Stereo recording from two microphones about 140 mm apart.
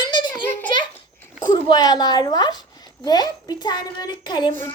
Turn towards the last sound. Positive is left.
turn(degrees=30)  # may be behind; listen again after turning